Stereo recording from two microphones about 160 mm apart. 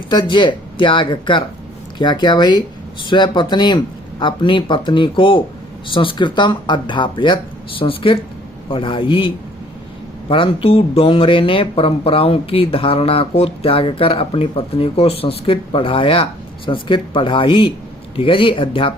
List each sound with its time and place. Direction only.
0.1 s speech: 30° left (ahead or behind)